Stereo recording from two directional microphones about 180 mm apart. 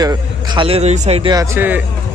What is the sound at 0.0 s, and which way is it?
A man's voice, 20° right (ahead or behind).